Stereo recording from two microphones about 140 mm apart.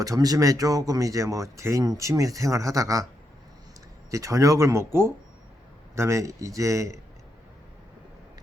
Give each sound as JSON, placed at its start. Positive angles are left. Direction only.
{"t": 0.0, "sound": "speech", "side_deg": -25}
{"t": 4.1, "sound": "speech", "side_deg": -25}